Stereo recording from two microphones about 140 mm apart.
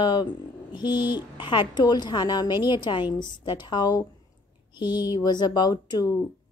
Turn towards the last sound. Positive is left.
turn(degrees=25)  # may be behind; listen again after turning